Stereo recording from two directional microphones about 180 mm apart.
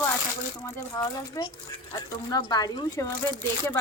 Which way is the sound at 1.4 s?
20° left (ahead or behind).